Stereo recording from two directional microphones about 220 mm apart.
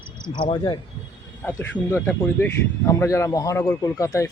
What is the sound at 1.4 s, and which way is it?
Speech, 10° left (ahead or behind).